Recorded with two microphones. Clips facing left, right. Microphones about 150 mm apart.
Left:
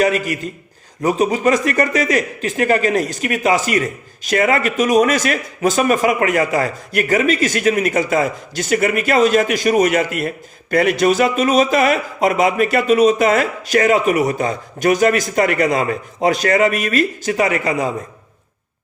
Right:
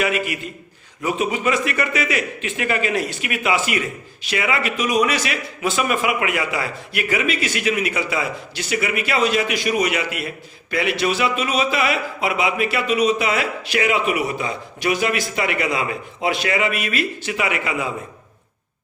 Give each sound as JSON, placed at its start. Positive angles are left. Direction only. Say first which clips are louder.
{"t": 0.0, "sound": "a man's voice", "louder": "left 5 dB", "side_deg": 40}